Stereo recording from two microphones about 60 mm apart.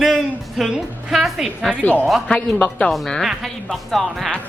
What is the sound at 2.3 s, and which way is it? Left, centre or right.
Speech, centre.